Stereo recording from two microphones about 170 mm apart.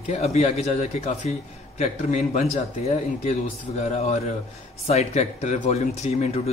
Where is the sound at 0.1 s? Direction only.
40° left (ahead or behind).